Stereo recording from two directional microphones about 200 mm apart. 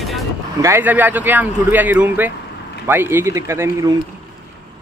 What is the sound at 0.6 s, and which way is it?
Speech, 10° right (ahead or behind).